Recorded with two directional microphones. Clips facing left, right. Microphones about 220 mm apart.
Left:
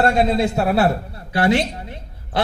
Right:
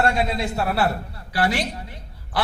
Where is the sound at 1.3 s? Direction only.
25° left (ahead or behind).